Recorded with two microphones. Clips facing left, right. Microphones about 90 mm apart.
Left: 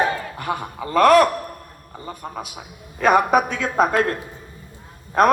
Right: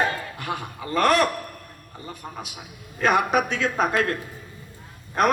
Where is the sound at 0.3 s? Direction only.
40° left (ahead or behind).